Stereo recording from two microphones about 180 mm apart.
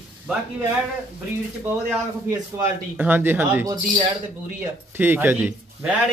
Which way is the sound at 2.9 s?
10° right (ahead or behind).